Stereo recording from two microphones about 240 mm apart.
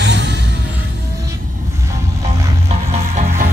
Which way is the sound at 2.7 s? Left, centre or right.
Right.